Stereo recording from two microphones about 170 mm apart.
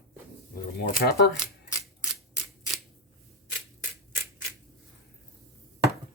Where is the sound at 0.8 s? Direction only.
70° left (ahead or behind).